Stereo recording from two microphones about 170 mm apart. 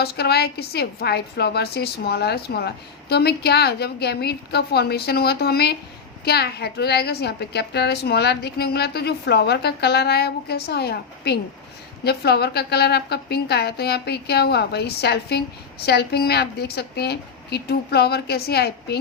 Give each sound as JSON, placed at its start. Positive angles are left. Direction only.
{"t": 0.0, "sound": "a woman's voice", "side_deg": 70}